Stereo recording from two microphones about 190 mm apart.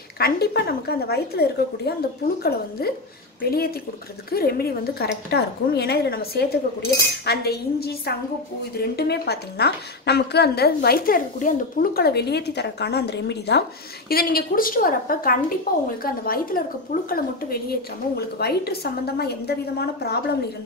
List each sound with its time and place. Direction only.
0.2 s a woman's voice: 55° left (ahead or behind)